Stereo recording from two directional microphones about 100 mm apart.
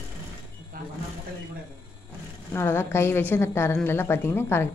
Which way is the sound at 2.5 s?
25° left (ahead or behind).